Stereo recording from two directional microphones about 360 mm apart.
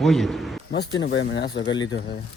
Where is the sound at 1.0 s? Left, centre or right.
Left.